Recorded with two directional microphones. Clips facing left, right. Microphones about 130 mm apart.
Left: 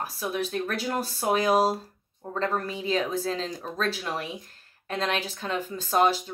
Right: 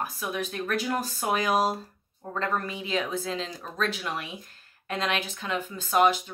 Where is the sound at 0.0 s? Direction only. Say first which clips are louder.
Left 2 dB; 30° left (ahead or behind).